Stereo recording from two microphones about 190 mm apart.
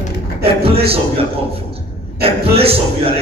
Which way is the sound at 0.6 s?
30° right (ahead or behind).